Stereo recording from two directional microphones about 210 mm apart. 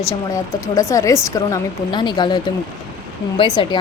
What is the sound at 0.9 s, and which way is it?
Speech, 15° left (ahead or behind).